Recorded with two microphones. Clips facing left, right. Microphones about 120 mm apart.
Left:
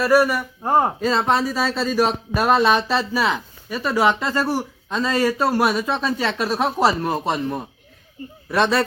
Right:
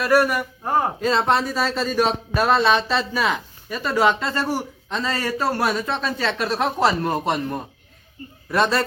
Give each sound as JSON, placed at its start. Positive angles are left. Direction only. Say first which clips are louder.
{"t": 0.0, "sound": "speech", "louder": "left 2 dB", "side_deg": 5}
{"t": 0.6, "sound": "speech", "louder": "left 4 dB", "side_deg": 25}
{"t": 1.0, "sound": "speech", "louder": "even", "side_deg": 0}